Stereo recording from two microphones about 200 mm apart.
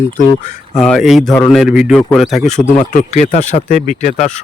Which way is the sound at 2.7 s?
35° left (ahead or behind).